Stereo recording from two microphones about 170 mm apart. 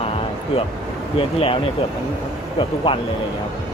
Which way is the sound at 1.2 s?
35° left (ahead or behind).